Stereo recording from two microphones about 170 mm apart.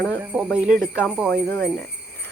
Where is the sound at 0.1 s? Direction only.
10° right (ahead or behind).